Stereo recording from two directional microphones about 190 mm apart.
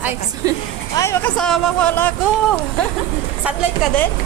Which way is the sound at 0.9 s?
15° left (ahead or behind).